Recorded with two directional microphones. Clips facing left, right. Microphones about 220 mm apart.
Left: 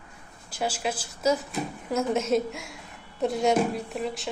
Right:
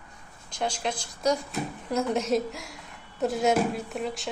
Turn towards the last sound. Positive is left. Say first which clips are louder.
# left 1 dB
turn(degrees=0)  # may be behind; listen again after turning